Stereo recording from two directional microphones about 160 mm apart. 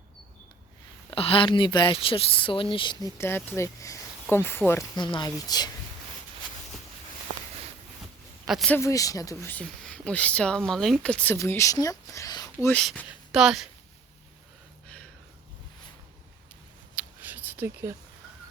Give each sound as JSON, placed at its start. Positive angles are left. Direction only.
{"t": 1.1, "sound": "speech", "side_deg": 35}
{"t": 3.2, "sound": "speech", "side_deg": 15}
{"t": 4.9, "sound": "speech", "side_deg": 30}
{"t": 8.4, "sound": "a man's voice", "side_deg": 0}
{"t": 8.7, "sound": "speech", "side_deg": 20}
{"t": 12.6, "sound": "speech", "side_deg": 5}
{"t": 14.8, "sound": "a sound", "side_deg": 5}
{"t": 16.9, "sound": "a sound", "side_deg": -10}